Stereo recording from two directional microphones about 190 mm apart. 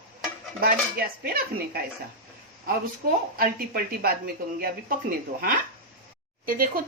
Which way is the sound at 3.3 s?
50° right (ahead or behind).